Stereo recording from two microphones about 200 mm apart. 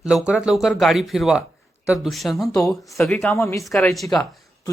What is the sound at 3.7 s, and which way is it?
Speech, centre (ahead or behind).